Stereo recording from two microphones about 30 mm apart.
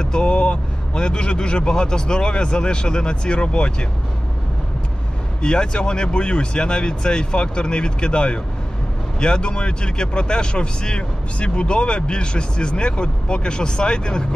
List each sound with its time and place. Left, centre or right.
0.0 s speech: left
5.4 s speech: left